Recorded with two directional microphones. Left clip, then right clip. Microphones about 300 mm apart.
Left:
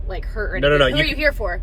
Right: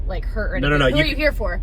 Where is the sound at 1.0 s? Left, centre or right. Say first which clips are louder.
Left 1 dB; centre.